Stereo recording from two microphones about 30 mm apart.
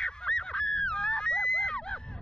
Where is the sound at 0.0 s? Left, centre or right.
Left.